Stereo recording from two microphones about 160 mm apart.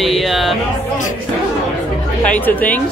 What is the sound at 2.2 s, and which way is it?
Speech, 10° left (ahead or behind).